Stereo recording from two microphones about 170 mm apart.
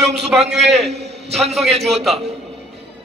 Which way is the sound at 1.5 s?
Centre (ahead or behind).